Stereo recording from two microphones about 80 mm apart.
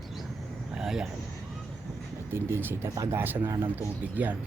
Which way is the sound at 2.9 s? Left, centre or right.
Right.